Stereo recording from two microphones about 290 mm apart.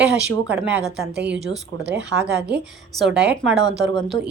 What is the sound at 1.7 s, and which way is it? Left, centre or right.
Speech, right.